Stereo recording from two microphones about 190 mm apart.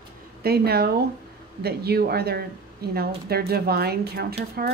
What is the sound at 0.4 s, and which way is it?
Speech, 55° right (ahead or behind).